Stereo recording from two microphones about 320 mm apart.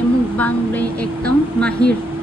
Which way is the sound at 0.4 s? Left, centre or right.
Centre.